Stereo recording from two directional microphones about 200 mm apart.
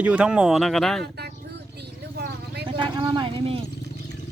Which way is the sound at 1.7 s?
55° right (ahead or behind).